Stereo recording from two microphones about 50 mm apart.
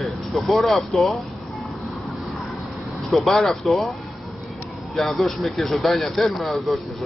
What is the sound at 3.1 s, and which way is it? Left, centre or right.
Speech, centre.